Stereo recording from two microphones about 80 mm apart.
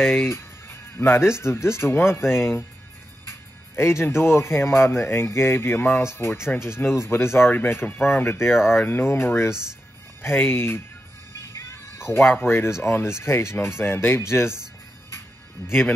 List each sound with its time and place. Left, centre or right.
0.0 s speech: left
11.3 s music: left
12.8 s speech: left
15.1 s music: left